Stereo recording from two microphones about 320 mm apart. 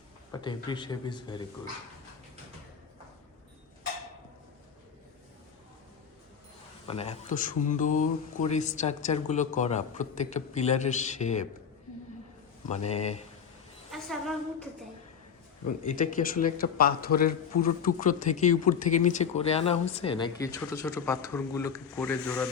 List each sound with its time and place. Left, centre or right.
0.3 s speech: centre
6.8 s speech: centre
12.6 s speech: left
13.9 s a sound: centre
15.6 s speech: left; by 22.4 s centre